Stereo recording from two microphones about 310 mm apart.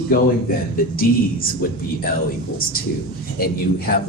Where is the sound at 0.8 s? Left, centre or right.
Left.